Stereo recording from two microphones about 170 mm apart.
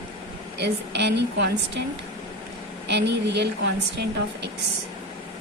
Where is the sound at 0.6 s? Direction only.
85° right.